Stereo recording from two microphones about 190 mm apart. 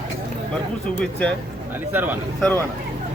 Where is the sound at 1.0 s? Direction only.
5° left (ahead or behind).